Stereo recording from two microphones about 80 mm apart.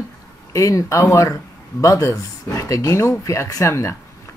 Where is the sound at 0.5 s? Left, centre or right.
Left.